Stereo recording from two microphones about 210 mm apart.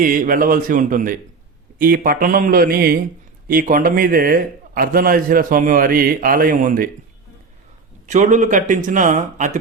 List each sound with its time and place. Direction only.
0.0 s a man's voice: 40° right (ahead or behind)
8.0 s speech: 35° right (ahead or behind)